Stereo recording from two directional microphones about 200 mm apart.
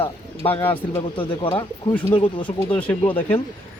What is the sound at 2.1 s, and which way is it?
Speech, 25° left (ahead or behind).